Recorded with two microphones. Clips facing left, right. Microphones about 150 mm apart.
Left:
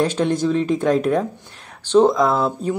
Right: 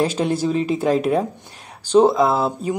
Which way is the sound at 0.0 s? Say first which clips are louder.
Left 1 dB; 10° right (ahead or behind).